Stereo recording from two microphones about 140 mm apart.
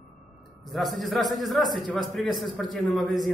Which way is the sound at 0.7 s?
Centre (ahead or behind).